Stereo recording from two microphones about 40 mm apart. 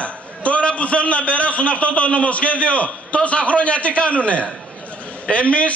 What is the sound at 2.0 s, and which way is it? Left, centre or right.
A man's voice, left.